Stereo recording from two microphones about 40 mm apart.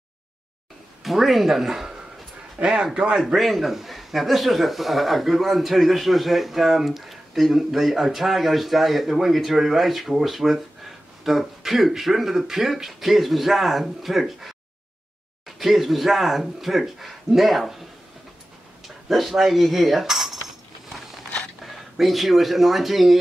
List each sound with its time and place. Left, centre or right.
1.0 s speech: centre
2.6 s speech: right
2.9 s speech: centre
3.3 s speech: centre
19.0 s cutlery: centre
21.9 s speech: centre